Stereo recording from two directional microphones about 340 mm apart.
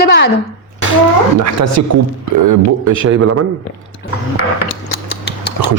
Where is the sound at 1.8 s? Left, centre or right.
Right.